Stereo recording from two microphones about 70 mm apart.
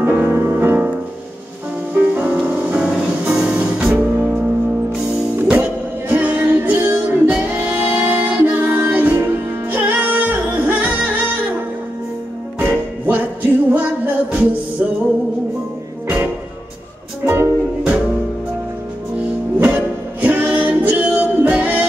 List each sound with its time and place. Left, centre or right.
0.0 s music: right
2.0 s music: right
5.3 s music: right
12.5 s music: right
17.3 s music: right
19.6 s music: right